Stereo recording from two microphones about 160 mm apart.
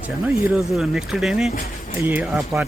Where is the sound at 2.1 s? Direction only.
15° right (ahead or behind).